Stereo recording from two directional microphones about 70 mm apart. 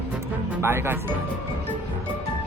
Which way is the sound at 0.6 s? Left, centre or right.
Right.